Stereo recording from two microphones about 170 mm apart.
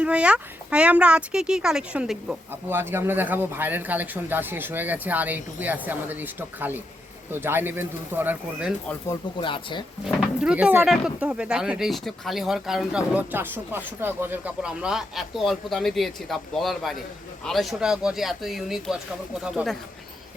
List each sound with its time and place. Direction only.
0.0 s speech: 5° right (ahead or behind)
9.4 s speech: 30° left (ahead or behind)
10.4 s speech: 5° right (ahead or behind)